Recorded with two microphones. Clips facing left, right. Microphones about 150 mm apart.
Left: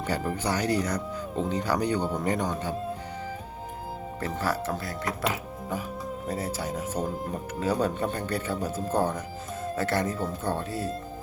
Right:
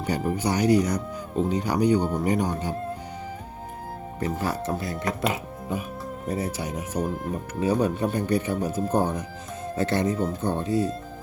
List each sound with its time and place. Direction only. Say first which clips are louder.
0.0 s speech: right 3 dB; 15° right (ahead or behind)
4.2 s speech: right 2 dB; 20° right (ahead or behind)